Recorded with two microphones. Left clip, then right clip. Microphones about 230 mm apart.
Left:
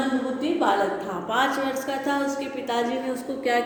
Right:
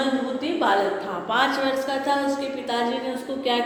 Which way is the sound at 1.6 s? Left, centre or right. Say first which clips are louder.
Right 3 dB; left.